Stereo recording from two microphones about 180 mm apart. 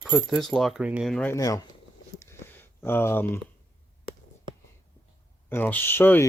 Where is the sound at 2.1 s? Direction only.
15° left (ahead or behind).